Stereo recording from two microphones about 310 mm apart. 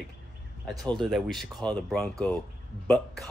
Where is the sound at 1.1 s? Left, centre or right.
Centre.